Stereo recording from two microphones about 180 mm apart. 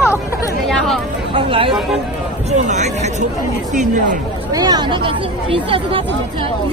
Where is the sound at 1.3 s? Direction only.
30° right (ahead or behind).